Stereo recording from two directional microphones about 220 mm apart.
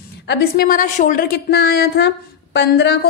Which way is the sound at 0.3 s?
45° left (ahead or behind).